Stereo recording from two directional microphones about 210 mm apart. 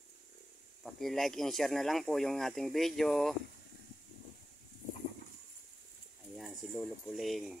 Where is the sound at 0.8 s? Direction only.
Centre (ahead or behind).